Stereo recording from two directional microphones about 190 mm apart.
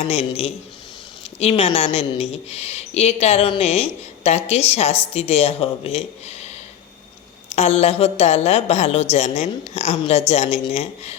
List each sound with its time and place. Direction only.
0.0 s a woman's voice: 30° left (ahead or behind)